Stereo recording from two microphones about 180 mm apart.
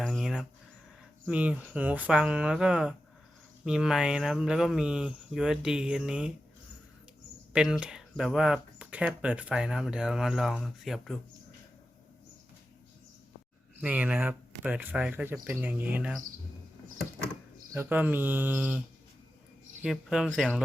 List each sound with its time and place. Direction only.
0.0 s a sound: centre (ahead or behind)
1.3 s speech: 5° right (ahead or behind)
7.5 s speech: 5° right (ahead or behind)
13.8 s speech: 10° right (ahead or behind)
17.7 s speech: 10° right (ahead or behind)
19.8 s speech: 5° right (ahead or behind)